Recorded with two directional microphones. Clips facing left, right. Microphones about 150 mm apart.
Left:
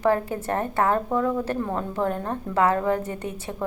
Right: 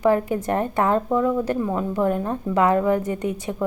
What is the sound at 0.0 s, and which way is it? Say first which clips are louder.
A woman's voice: right 3 dB; 15° right (ahead or behind).